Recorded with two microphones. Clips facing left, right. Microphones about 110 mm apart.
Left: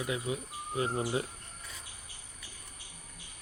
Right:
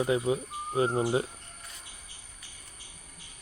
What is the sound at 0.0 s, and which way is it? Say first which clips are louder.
Speech: right 8 dB; 30° right (ahead or behind).